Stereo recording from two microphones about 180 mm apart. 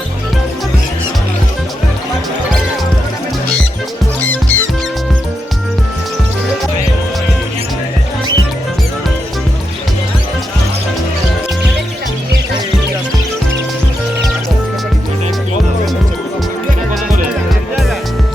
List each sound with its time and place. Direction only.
4.3 s music: 10° left (ahead or behind)